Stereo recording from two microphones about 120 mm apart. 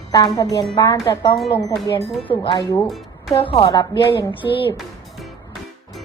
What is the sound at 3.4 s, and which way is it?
Speech, 45° left (ahead or behind).